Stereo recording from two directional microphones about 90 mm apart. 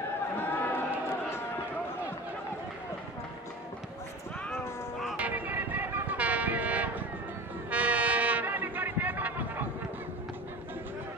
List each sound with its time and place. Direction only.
0.4 s run: 20° left (ahead or behind)
5.1 s vehicle: 20° right (ahead or behind)
7.7 s music: 15° right (ahead or behind)